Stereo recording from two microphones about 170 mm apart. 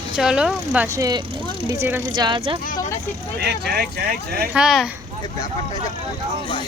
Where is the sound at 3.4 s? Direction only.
70° right (ahead or behind).